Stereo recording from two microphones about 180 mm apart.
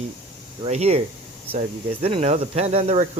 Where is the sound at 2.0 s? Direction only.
35° right (ahead or behind).